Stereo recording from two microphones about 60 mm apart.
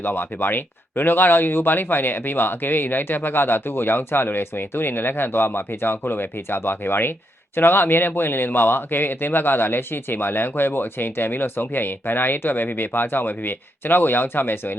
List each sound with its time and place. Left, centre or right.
0.0 s speech: left